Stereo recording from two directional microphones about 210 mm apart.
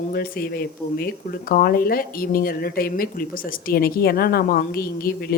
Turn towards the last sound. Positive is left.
turn(degrees=45)  # may be behind; listen again after turning